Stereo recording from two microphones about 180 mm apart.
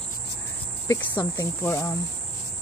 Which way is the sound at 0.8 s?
15° left (ahead or behind).